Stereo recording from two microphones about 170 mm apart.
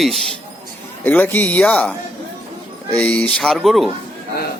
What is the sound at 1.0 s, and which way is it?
Speech, 10° left (ahead or behind).